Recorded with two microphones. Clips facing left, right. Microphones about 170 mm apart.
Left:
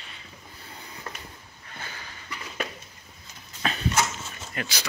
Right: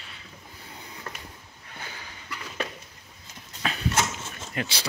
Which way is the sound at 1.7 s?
10° right (ahead or behind).